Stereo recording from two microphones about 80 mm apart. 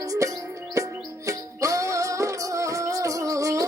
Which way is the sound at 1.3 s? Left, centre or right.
Right.